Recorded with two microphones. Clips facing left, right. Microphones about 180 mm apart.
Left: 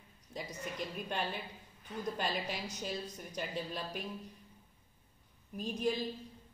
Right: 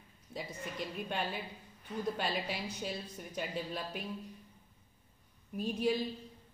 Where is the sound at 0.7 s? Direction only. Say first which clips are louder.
Right 1 dB; centre (ahead or behind).